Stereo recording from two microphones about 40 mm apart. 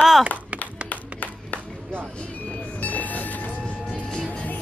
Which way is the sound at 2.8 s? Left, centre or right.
Left.